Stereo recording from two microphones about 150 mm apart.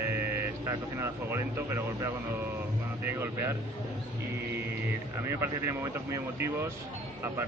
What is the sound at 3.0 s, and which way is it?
Speech, 15° right (ahead or behind).